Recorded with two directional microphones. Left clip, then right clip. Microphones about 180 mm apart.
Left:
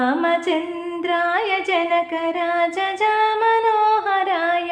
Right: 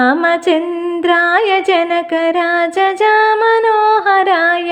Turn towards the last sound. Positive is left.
turn(degrees=-45)  # may be behind; listen again after turning